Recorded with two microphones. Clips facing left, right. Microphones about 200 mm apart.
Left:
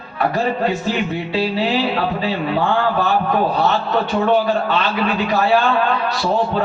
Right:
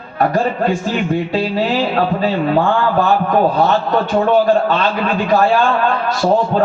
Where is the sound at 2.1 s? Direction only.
45° right (ahead or behind).